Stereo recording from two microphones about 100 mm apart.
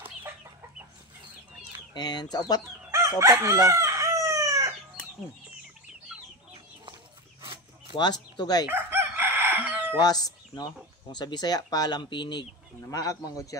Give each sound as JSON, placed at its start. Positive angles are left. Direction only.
{"t": 0.0, "sound": "chicken", "side_deg": -20}
{"t": 2.0, "sound": "speech", "side_deg": 45}
{"t": 2.9, "sound": "crowing", "side_deg": -30}
{"t": 7.9, "sound": "speech", "side_deg": 45}
{"t": 8.6, "sound": "chicken", "side_deg": -20}
{"t": 9.9, "sound": "speech", "side_deg": 40}
{"t": 12.9, "sound": "speech", "side_deg": 35}